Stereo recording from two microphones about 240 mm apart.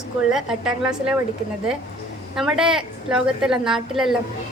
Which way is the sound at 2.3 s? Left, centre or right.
Centre.